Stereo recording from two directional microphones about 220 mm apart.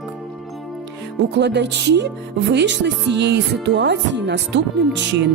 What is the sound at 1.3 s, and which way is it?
Speech, 50° right (ahead or behind).